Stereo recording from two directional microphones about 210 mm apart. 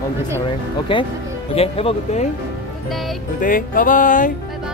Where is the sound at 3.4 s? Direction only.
40° left (ahead or behind).